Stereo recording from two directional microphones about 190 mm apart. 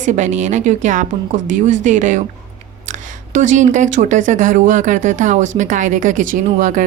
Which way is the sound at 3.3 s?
40° right (ahead or behind).